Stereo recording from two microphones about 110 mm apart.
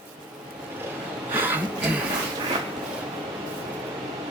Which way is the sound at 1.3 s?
20° right (ahead or behind).